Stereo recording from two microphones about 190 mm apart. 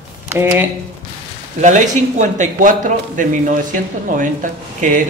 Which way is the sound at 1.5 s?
40° right (ahead or behind).